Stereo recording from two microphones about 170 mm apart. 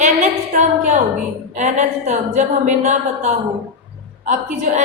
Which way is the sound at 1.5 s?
45° right (ahead or behind).